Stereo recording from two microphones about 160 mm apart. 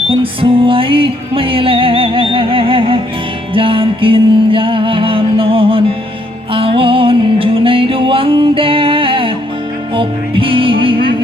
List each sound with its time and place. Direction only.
0.1 s music: 35° right (ahead or behind)